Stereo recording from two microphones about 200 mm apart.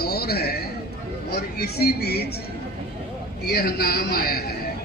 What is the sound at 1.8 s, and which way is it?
Speech, 50° left (ahead or behind).